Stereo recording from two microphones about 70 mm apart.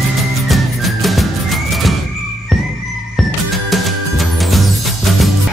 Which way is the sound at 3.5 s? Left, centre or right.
Centre.